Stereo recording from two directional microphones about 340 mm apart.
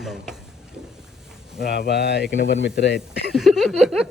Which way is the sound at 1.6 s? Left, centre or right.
Left.